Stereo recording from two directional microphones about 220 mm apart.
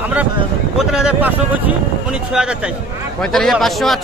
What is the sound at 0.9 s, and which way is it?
Speech, 5° right (ahead or behind).